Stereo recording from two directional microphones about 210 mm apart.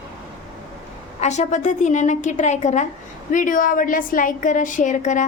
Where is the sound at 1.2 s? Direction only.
35° left (ahead or behind).